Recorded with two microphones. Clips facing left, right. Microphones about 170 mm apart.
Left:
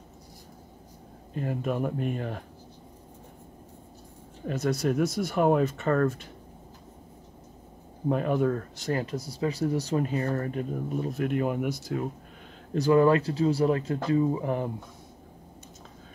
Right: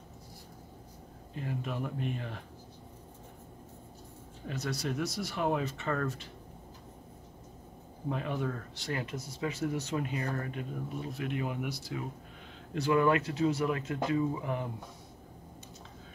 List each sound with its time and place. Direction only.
1.3 s speech: 50° left (ahead or behind)
4.5 s speech: 50° left (ahead or behind)
8.1 s speech: 50° left (ahead or behind)